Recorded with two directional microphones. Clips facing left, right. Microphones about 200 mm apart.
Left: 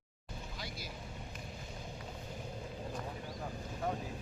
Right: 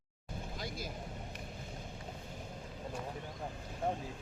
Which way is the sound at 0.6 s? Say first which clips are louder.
Right 5 dB; 50° right (ahead or behind).